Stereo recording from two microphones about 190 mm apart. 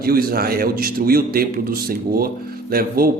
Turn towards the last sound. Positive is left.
turn(degrees=-50)  # may be behind; listen again after turning